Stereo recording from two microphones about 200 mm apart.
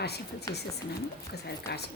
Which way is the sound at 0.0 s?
55° left (ahead or behind).